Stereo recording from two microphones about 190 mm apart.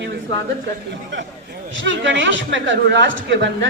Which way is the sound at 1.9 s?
70° right (ahead or behind).